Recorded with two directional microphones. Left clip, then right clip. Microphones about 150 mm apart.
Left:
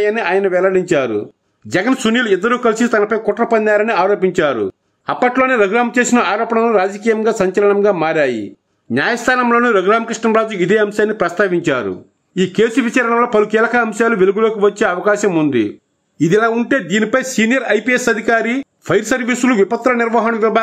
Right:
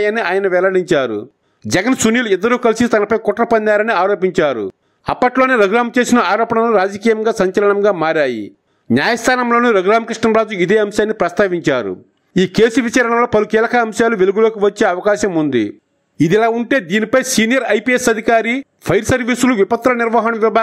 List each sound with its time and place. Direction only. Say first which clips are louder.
0.0 s speech: even; 35° right (ahead or behind)